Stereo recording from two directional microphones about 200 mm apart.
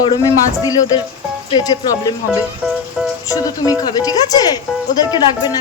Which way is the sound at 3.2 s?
15° left (ahead or behind).